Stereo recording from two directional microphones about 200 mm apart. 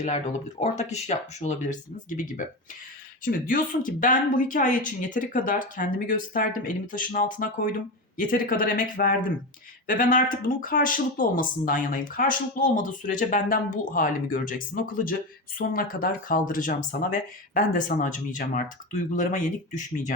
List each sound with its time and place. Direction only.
0.0 s speech: 35° left (ahead or behind)
15.5 s speech: 45° left (ahead or behind)